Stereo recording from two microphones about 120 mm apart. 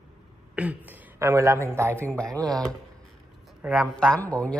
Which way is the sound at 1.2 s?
25° right (ahead or behind).